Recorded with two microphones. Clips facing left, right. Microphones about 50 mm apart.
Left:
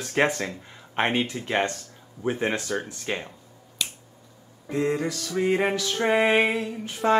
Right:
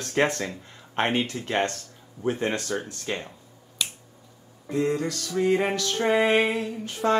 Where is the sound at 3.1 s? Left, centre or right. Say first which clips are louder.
Left 1 dB; left.